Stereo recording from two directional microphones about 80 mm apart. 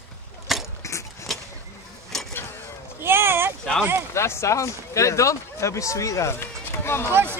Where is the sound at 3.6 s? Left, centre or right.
Centre.